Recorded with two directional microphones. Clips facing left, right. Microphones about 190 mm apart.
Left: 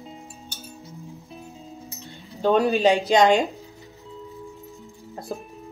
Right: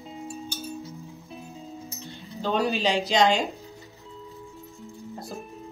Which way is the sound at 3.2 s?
55° left (ahead or behind).